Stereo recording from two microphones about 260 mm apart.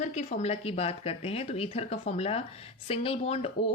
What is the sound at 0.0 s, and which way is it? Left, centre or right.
Speech, left.